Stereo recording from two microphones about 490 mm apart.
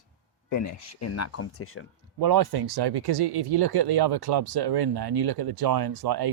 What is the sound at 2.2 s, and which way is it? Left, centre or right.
Speech, right.